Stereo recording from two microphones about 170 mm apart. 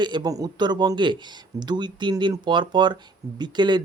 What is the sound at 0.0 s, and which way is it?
Speech, 25° right (ahead or behind).